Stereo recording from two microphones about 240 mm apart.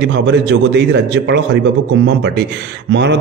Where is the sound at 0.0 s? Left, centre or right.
Right.